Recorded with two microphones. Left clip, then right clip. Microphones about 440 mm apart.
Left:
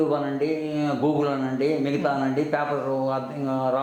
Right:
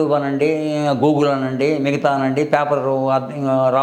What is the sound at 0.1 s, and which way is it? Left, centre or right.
Speech, right.